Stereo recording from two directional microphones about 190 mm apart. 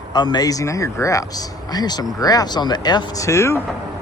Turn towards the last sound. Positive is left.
turn(degrees=15)  # may be behind; listen again after turning